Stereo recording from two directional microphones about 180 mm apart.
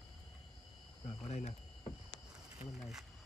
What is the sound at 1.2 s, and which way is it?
Speech, 40° left (ahead or behind).